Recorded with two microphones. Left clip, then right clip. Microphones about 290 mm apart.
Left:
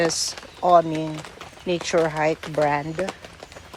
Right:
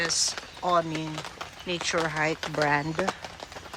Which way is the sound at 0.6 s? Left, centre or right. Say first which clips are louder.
Left 9 dB; centre.